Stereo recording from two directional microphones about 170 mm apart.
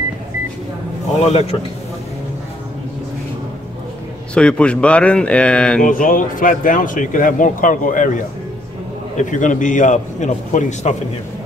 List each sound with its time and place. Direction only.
1.2 s a man's voice: 40° left (ahead or behind)
4.3 s speech: 5° left (ahead or behind)
5.9 s speech: 50° left (ahead or behind)
9.3 s speech: 50° left (ahead or behind)